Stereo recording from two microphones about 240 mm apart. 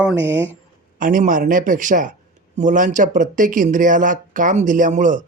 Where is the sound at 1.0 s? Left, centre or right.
Right.